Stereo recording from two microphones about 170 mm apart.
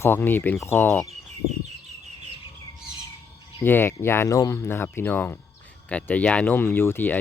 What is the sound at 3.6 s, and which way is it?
Speech, 10° left (ahead or behind).